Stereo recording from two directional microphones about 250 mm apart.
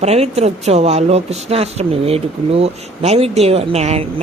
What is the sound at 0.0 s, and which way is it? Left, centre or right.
Speech, right.